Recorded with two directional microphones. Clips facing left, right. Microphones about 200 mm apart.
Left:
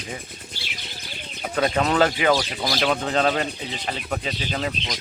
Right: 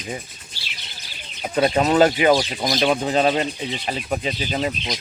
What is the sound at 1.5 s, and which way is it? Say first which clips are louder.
Speech: right 4 dB; 20° right (ahead or behind).